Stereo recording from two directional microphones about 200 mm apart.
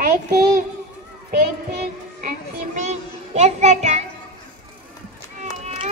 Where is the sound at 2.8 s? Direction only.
35° right (ahead or behind).